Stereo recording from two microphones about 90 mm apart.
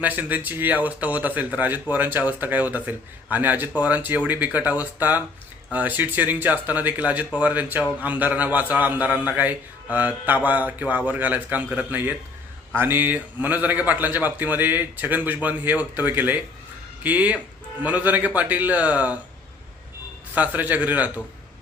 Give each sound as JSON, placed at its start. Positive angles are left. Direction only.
{"t": 0.0, "sound": "a man's voice", "side_deg": -20}
{"t": 20.3, "sound": "a man's voice", "side_deg": -15}